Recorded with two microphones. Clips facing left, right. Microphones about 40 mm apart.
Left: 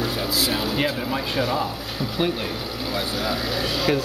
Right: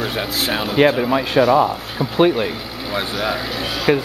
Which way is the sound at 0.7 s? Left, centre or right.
Right.